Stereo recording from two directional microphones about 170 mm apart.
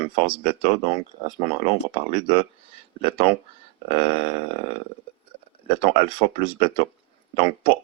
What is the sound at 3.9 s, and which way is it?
Speech, 35° left (ahead or behind).